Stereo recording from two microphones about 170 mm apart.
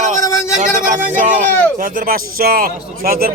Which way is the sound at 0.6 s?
50° right (ahead or behind).